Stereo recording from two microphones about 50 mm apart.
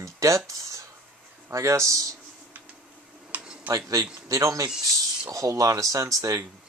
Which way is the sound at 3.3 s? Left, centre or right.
Right.